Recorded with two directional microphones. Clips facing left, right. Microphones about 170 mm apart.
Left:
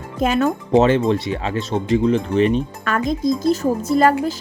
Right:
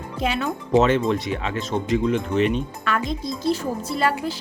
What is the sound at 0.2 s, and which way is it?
Speech, 45° left (ahead or behind).